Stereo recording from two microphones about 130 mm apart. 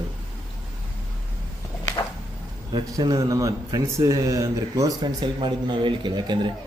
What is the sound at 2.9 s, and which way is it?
Speech, 30° right (ahead or behind).